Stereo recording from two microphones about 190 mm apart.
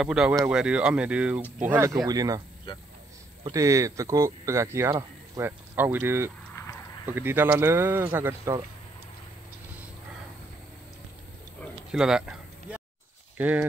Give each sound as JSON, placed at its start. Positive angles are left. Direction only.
{"t": 0.0, "sound": "speech", "side_deg": -5}
{"t": 3.4, "sound": "speech", "side_deg": -15}
{"t": 11.6, "sound": "a sound", "side_deg": 0}
{"t": 13.4, "sound": "speech", "side_deg": -10}